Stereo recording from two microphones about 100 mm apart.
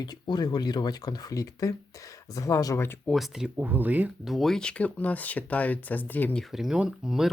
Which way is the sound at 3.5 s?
20° right (ahead or behind).